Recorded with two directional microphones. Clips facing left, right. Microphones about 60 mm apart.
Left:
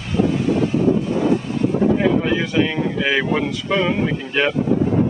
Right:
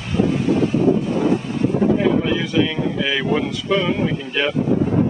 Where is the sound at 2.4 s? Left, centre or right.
Left.